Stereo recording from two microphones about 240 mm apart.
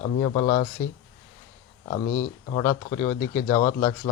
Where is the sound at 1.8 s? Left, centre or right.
Left.